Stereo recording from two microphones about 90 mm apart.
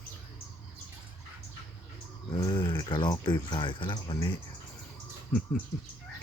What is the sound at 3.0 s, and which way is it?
Speech, 55° left (ahead or behind).